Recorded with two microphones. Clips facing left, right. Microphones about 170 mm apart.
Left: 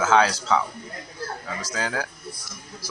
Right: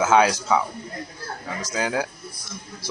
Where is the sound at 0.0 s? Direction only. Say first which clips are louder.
Right 2 dB; 15° right (ahead or behind).